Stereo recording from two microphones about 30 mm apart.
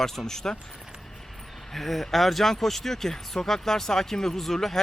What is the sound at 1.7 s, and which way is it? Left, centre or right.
Speech, centre.